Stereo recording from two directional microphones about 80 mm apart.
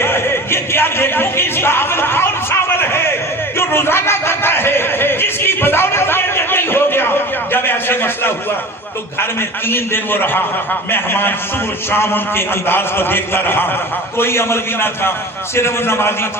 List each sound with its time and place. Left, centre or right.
0.0 s music: left
3.6 s a sound: left
9.6 s a man's voice: left